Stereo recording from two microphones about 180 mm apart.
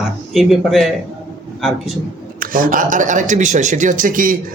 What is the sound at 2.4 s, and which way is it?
A man's voice, 50° right (ahead or behind).